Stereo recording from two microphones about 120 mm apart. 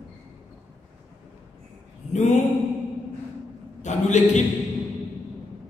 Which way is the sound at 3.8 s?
85° left.